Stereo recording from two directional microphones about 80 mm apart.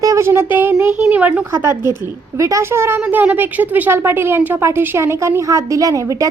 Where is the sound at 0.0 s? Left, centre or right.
Right.